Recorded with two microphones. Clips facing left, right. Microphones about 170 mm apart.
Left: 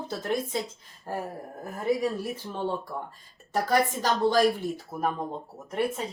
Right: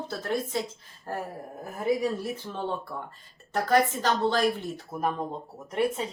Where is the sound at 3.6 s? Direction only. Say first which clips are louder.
Right 2 dB; 10° left (ahead or behind).